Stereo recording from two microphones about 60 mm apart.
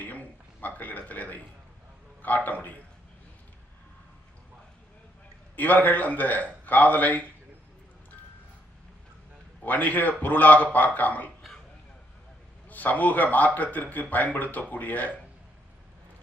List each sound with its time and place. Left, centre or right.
0.0 s a sound: left
2.2 s speech: left
5.5 s speech: left
9.6 s speech: left
12.6 s speech: left